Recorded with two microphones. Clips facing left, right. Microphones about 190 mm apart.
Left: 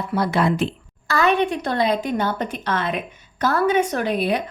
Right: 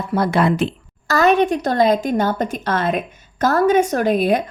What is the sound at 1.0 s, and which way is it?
A woman's voice, 40° right (ahead or behind).